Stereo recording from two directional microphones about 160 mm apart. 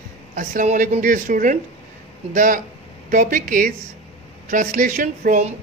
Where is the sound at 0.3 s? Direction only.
55° right (ahead or behind).